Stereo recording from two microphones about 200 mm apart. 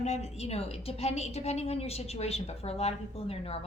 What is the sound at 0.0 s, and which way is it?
A woman's voice, 35° left (ahead or behind).